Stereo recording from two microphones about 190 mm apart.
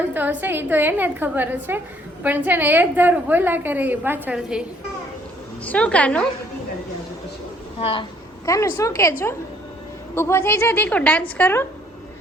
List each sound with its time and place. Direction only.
0.1 s a woman's voice: 10° right (ahead or behind)
5.6 s a woman's voice: 5° left (ahead or behind)
7.8 s speech: 30° left (ahead or behind)
8.4 s a woman's voice: 15° left (ahead or behind)
10.2 s a woman's voice: 10° left (ahead or behind)